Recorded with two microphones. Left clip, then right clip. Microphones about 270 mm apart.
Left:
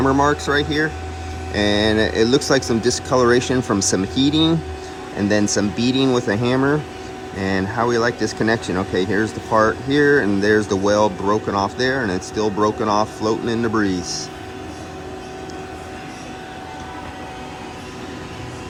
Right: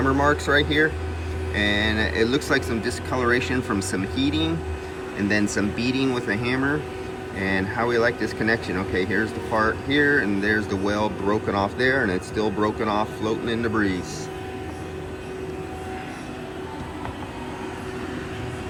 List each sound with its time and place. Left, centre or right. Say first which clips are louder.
0.0 s speech: left 4 dB; centre